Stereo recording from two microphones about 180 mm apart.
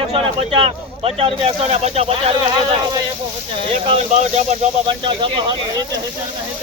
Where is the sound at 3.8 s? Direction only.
35° right (ahead or behind).